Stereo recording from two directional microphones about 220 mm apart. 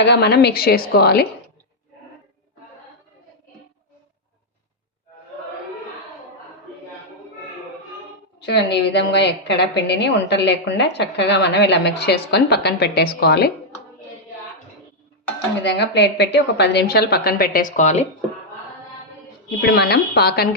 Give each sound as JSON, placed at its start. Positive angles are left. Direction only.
{"t": 0.0, "sound": "a woman's voice", "side_deg": 50}
{"t": 8.4, "sound": "a woman's voice", "side_deg": 50}
{"t": 15.6, "sound": "a woman's voice", "side_deg": 50}
{"t": 19.5, "sound": "a woman's voice", "side_deg": 50}